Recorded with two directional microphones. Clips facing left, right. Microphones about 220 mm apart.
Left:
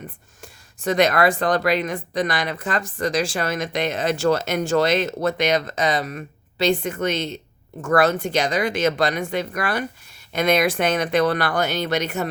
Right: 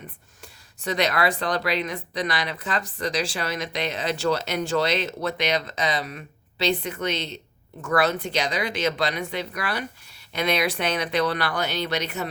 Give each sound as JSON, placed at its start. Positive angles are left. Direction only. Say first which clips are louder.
{"t": 0.4, "sound": "speech", "louder": "left 6 dB", "side_deg": 50}